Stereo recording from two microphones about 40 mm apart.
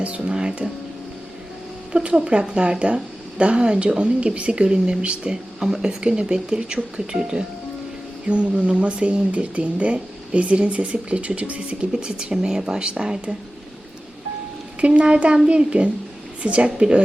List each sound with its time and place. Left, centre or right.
0.0 s speech: right
1.9 s speech: right
5.5 s speech: centre
6.0 s speech: right
8.3 s speech: right
11.9 s speech: centre
14.8 s speech: right